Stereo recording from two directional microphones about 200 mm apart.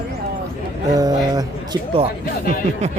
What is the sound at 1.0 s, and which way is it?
A man's voice, 20° right (ahead or behind).